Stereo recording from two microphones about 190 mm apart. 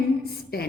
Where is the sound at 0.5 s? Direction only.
55° left (ahead or behind).